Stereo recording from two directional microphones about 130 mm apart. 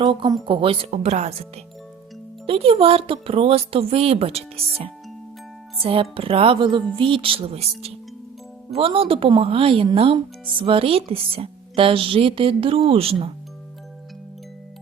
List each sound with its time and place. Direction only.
0.0 s speech: 35° right (ahead or behind); by 1.5 s 55° right (ahead or behind)
2.5 s speech: 45° right (ahead or behind)
5.8 s speech: 45° right (ahead or behind)